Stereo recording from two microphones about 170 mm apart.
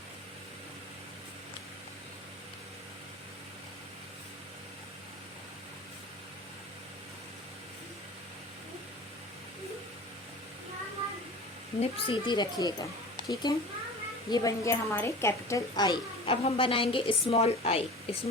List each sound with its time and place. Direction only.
11.8 s speech: 30° left (ahead or behind)